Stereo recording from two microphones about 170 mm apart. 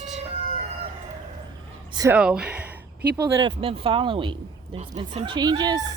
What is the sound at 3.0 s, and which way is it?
Speech, 70° right (ahead or behind).